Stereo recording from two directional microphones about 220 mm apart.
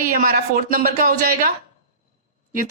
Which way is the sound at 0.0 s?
40° right (ahead or behind).